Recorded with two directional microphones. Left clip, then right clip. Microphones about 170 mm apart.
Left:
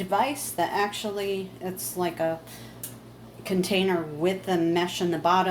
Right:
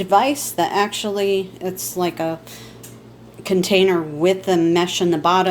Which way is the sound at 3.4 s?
55° right (ahead or behind).